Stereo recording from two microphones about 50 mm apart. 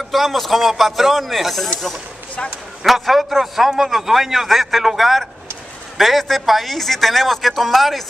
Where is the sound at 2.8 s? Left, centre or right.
Centre.